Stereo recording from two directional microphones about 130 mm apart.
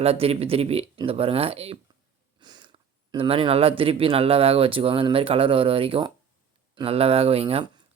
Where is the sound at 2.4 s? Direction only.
35° right (ahead or behind).